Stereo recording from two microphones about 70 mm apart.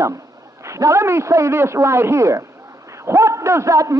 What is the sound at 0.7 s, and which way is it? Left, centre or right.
A man's voice, right.